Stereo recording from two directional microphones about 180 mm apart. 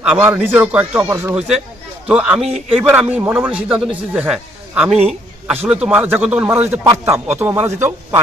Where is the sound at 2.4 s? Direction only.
35° right (ahead or behind).